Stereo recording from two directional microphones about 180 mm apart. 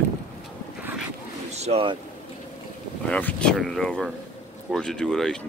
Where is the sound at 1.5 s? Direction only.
35° right (ahead or behind).